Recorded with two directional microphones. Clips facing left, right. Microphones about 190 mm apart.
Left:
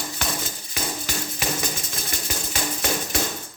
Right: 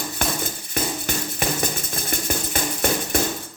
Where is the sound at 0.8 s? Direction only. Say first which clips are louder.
Right 5 dB; 55° right (ahead or behind).